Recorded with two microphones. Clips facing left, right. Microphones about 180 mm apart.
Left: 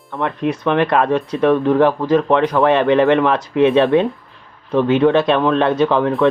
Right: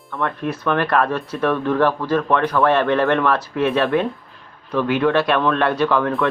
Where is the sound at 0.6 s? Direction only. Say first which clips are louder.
Left 3 dB; 20° left (ahead or behind).